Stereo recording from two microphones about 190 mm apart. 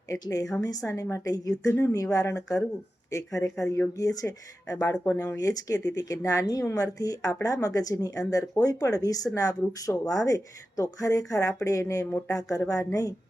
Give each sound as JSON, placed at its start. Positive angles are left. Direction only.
{"t": 0.1, "sound": "speech", "side_deg": 20}